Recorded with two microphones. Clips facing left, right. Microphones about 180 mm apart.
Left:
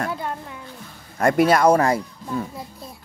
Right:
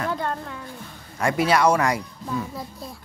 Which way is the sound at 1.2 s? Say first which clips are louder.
Left 4 dB; 50° left (ahead or behind).